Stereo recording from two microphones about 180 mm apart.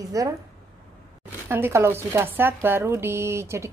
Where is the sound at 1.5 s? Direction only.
15° right (ahead or behind).